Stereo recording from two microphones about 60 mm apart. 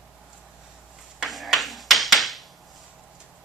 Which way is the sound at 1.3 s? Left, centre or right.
Centre.